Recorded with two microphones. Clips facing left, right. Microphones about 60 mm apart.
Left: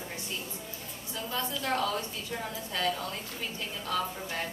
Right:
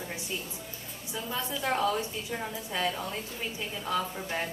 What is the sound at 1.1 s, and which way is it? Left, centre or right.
A woman's voice, centre.